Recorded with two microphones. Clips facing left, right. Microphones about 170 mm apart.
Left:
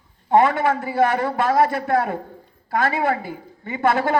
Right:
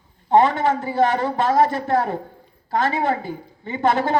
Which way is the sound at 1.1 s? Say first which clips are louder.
Even; 20° right (ahead or behind).